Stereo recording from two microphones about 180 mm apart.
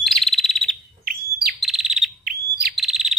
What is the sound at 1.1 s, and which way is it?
Bird, 55° right (ahead or behind).